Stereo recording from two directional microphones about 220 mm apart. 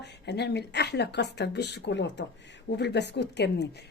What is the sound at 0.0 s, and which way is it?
Speech, 50° left (ahead or behind).